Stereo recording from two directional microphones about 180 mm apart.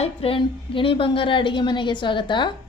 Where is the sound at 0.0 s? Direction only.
30° left (ahead or behind).